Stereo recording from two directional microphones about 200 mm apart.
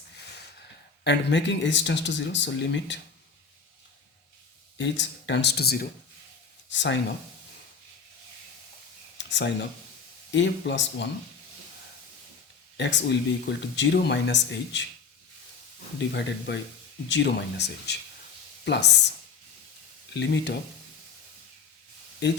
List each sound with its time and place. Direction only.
1.0 s speech: 60° left (ahead or behind)
4.8 s speech: 60° left (ahead or behind)
6.7 s speech: 65° left (ahead or behind)
9.1 s speech: 60° left (ahead or behind)
12.7 s speech: 60° left (ahead or behind)
16.0 s speech: 60° left (ahead or behind)
20.1 s speech: 60° left (ahead or behind)
22.2 s speech: 60° left (ahead or behind)